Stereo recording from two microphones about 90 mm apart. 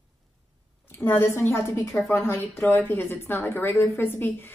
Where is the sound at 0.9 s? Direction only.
30° left (ahead or behind).